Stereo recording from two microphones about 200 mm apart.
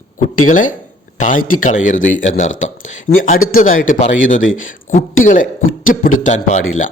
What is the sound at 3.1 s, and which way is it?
Speech, 50° left (ahead or behind).